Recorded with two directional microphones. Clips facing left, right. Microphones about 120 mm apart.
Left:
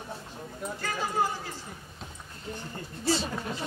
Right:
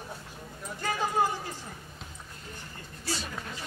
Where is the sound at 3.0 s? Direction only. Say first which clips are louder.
Left 8 dB; 25° left (ahead or behind).